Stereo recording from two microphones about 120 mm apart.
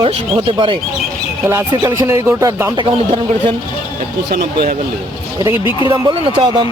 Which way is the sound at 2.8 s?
45° right (ahead or behind).